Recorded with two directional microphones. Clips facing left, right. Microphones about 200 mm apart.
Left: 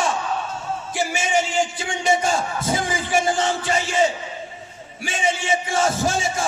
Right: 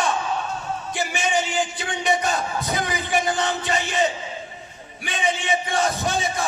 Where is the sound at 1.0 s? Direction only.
25° left (ahead or behind).